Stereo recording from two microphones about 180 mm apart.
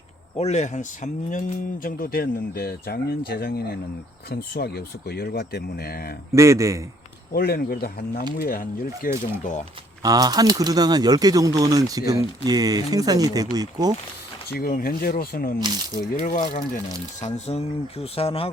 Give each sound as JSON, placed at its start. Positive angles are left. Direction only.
{"t": 0.3, "sound": "speech", "side_deg": 40}
{"t": 6.3, "sound": "a man's voice", "side_deg": -15}
{"t": 7.3, "sound": "speech", "side_deg": 60}
{"t": 10.0, "sound": "speech", "side_deg": -20}
{"t": 14.6, "sound": "speech", "side_deg": 55}
{"t": 15.5, "sound": "speech", "side_deg": -25}
{"t": 16.2, "sound": "speech", "side_deg": 45}